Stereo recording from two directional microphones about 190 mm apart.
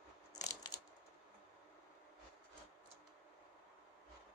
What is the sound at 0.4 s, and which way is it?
Crushing, 15° left (ahead or behind).